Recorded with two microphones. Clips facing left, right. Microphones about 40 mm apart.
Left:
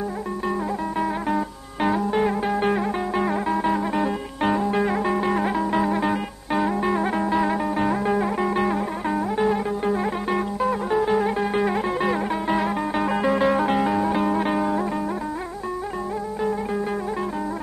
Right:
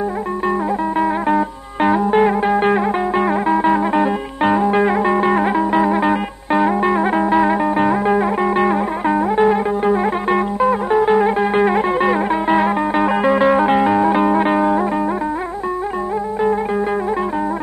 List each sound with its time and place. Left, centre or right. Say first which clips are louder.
0.9 s music: right 7 dB; right